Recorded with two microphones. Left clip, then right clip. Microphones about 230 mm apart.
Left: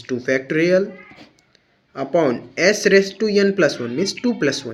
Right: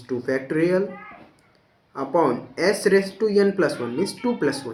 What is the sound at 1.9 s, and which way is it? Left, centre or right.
Speech, left.